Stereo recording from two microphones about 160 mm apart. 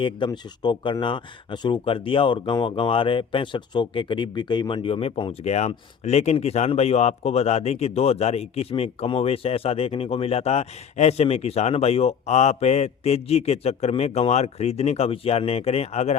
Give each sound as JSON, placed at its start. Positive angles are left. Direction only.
{"t": 0.3, "sound": "speech", "side_deg": 30}